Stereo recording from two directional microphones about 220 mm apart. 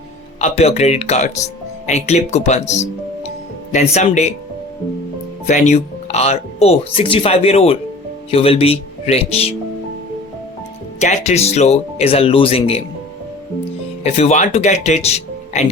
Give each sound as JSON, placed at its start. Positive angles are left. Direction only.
{"t": 0.3, "sound": "speech", "side_deg": 30}
{"t": 5.5, "sound": "speech", "side_deg": 30}
{"t": 11.0, "sound": "speech", "side_deg": 30}
{"t": 14.0, "sound": "speech", "side_deg": 30}